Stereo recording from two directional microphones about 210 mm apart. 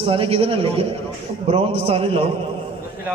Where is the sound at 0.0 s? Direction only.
25° right (ahead or behind).